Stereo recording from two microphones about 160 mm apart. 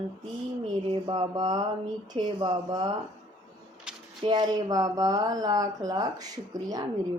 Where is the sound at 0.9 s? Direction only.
30° right (ahead or behind).